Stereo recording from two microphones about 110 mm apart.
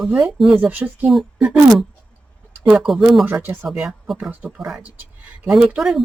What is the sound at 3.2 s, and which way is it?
Speech, 20° right (ahead or behind).